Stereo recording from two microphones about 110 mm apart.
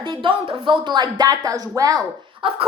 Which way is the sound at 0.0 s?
50° right (ahead or behind).